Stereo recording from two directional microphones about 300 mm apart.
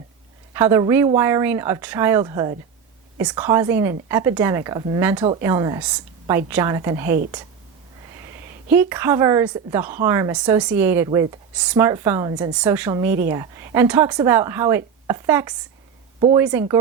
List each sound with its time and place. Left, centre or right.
0.5 s speech: centre
8.7 s speech: centre